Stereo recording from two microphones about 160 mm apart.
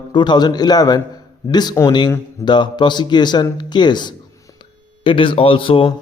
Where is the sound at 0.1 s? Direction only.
30° left (ahead or behind).